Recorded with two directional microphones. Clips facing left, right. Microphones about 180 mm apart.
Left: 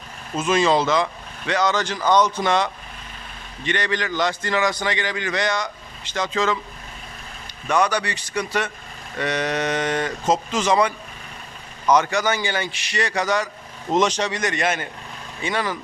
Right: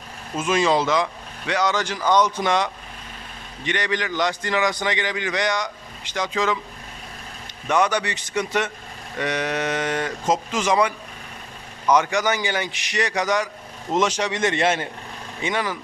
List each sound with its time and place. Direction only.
0.3 s a man's voice: 10° right (ahead or behind)
7.7 s a man's voice: 20° right (ahead or behind)
14.3 s a man's voice: 25° right (ahead or behind)